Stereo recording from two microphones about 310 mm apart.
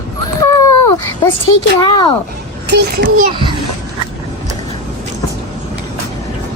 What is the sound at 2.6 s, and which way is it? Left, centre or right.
Speech, right.